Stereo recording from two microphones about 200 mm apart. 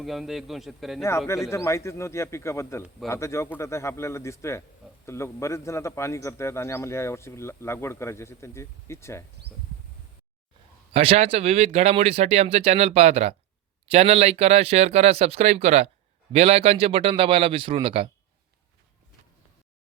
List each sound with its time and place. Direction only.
0.0 s a man's voice: centre (ahead or behind)
1.5 s a man's voice: 15° left (ahead or behind)
10.9 s a man's voice: 30° right (ahead or behind)